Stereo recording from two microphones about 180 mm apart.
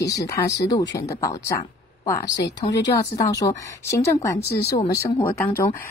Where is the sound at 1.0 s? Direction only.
20° left (ahead or behind).